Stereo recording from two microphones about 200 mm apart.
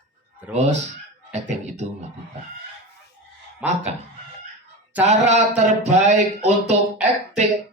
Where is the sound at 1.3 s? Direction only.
35° right (ahead or behind).